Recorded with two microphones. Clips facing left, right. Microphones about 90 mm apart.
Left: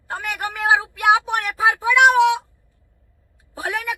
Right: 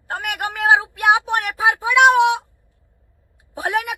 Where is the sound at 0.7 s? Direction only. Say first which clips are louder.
Even; 20° right (ahead or behind).